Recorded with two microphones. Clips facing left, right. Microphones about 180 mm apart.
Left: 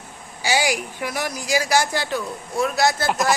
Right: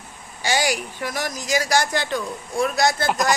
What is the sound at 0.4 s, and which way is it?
Speech, 10° left (ahead or behind).